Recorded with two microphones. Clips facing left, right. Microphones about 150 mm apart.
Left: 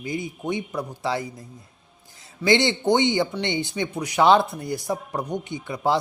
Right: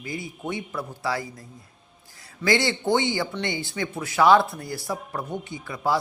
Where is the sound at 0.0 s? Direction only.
20° left (ahead or behind).